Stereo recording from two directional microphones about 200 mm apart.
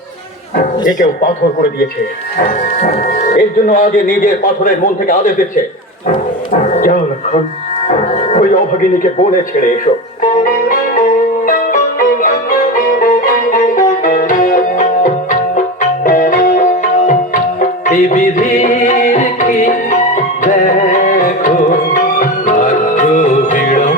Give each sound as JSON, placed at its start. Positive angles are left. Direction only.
{"t": 0.5, "sound": "speech", "side_deg": 40}
{"t": 2.4, "sound": "speech", "side_deg": 40}
{"t": 6.1, "sound": "music", "side_deg": 40}
{"t": 7.9, "sound": "speech", "side_deg": 35}
{"t": 10.2, "sound": "music", "side_deg": 40}